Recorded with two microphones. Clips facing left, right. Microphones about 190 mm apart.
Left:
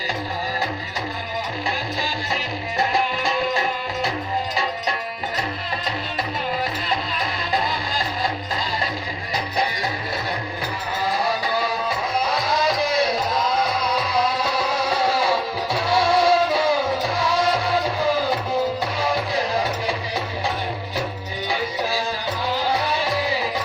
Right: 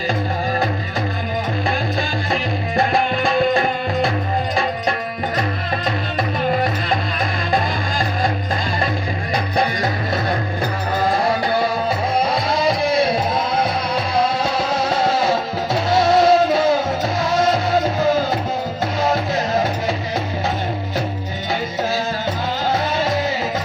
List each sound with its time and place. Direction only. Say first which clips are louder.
2.0 s music: right 5 dB; 55° right (ahead or behind)
9.3 s music: right 4 dB; 55° right (ahead or behind)
11.9 s music: right 4 dB; 55° right (ahead or behind)
14.4 s music: right 3 dB; 25° right (ahead or behind)